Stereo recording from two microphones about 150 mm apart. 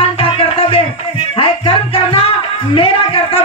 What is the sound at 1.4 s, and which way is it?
Music, 40° left (ahead or behind).